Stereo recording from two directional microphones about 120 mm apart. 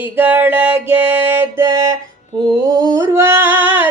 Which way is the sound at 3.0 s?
25° right (ahead or behind).